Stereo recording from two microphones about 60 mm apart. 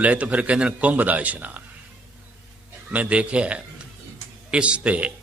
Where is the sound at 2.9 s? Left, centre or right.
Right.